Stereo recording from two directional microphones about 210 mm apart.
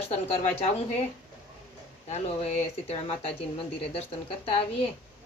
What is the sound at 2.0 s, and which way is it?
Speech, 30° left (ahead or behind).